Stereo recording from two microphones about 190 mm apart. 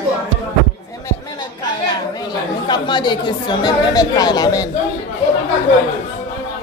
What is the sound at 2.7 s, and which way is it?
A woman's voice, 25° left (ahead or behind).